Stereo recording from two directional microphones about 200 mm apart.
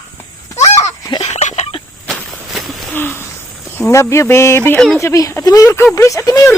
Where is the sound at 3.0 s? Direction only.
10° left (ahead or behind).